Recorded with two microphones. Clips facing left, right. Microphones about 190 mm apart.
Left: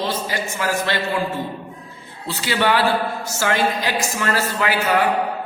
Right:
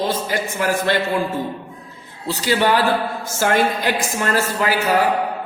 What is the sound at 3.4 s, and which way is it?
A man's voice, 50° right (ahead or behind).